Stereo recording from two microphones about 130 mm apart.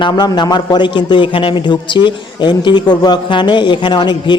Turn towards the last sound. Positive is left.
turn(degrees=35)  # may be behind; listen again after turning